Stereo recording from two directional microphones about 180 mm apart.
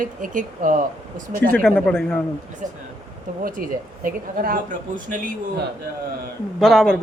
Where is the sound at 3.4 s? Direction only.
50° right (ahead or behind).